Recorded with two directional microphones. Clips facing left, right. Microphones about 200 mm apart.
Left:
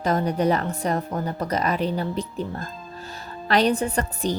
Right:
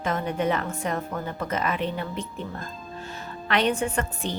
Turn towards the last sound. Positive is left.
turn(degrees=35)  # may be behind; listen again after turning